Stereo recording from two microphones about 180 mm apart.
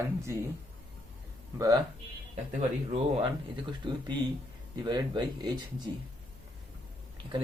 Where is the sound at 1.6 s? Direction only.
20° right (ahead or behind).